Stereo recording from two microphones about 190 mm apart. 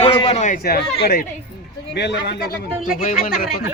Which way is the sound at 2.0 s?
65° left (ahead or behind).